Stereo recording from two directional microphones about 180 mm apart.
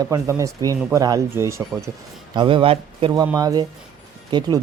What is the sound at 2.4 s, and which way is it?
Speech, 30° right (ahead or behind).